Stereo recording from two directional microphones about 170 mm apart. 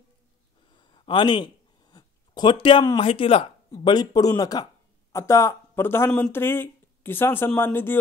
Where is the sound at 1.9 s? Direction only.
25° left (ahead or behind).